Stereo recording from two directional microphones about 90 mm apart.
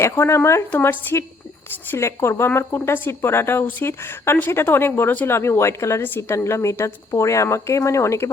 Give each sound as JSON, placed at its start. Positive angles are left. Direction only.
{"t": 0.0, "sound": "a woman's voice", "side_deg": 30}